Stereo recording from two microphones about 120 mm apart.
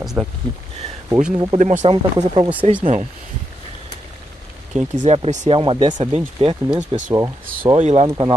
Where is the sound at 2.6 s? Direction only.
65° right (ahead or behind).